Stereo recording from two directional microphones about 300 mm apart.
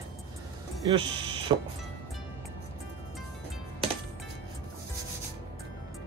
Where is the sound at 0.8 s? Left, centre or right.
Centre.